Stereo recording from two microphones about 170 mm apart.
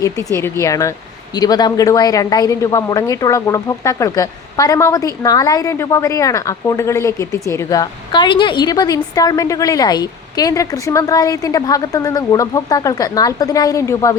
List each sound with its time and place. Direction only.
0.0 s speech: 15° left (ahead or behind)